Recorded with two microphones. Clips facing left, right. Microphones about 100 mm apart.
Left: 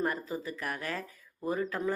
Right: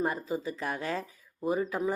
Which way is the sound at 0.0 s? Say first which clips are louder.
Right 2 dB; 20° right (ahead or behind).